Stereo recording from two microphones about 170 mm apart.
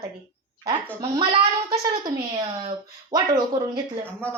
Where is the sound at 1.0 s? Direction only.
30° right (ahead or behind).